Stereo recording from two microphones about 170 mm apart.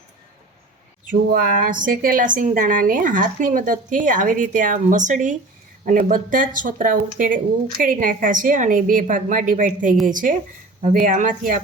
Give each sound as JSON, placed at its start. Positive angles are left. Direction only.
{"t": 1.0, "sound": "a woman's voice", "side_deg": -55}